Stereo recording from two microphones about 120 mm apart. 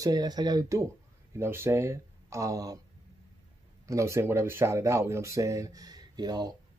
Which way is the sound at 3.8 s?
25° right (ahead or behind).